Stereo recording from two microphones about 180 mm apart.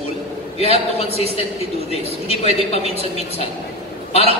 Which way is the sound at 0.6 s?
35° left (ahead or behind).